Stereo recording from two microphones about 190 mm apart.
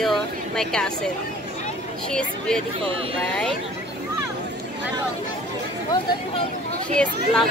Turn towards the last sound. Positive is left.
turn(degrees=5)  # may be behind; listen again after turning